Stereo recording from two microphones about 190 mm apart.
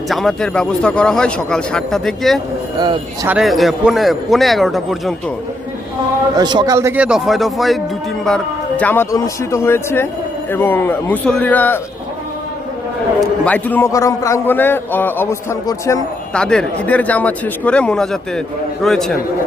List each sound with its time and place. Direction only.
0.1 s speech: centre (ahead or behind)
2.7 s speech: 20° right (ahead or behind)
3.2 s speech: centre (ahead or behind)
6.3 s speech: 20° right (ahead or behind); by 7.8 s centre (ahead or behind)
8.8 s a man's voice: 10° left (ahead or behind)
13.1 s a man's voice: 5° left (ahead or behind)
16.3 s speech: 5° left (ahead or behind)